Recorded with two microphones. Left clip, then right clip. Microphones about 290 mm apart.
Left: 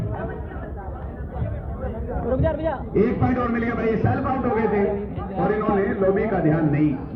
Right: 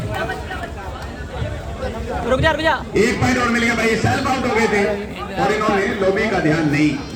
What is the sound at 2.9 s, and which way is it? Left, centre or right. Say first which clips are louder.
A man's voice: right 4 dB; right.